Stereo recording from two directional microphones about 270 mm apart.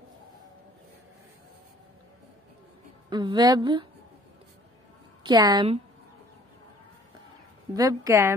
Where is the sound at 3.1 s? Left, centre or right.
Centre.